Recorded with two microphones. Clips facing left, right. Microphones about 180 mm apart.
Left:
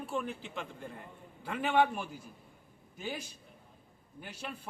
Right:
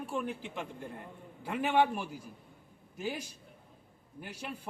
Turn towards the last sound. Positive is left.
turn(degrees=-10)  # may be behind; listen again after turning